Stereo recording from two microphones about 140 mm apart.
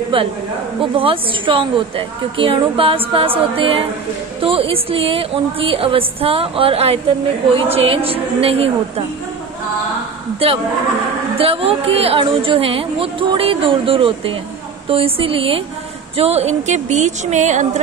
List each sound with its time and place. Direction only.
0.1 s a woman's voice: 35° right (ahead or behind)
11.3 s a woman's voice: 40° right (ahead or behind)